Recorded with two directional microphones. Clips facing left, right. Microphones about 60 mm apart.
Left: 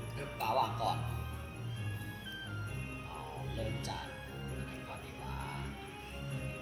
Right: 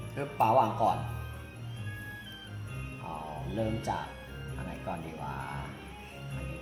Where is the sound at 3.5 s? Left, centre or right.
Right.